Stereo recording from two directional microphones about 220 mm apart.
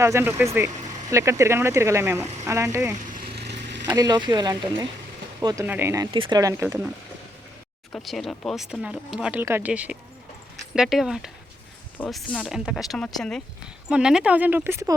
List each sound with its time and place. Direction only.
0.0 s speech: 10° right (ahead or behind)
3.3 s vehicle: 50° right (ahead or behind)
3.8 s speech: 15° right (ahead or behind)
7.9 s speech: centre (ahead or behind)